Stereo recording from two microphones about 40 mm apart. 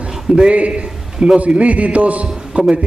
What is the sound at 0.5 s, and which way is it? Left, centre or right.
A man's voice, right.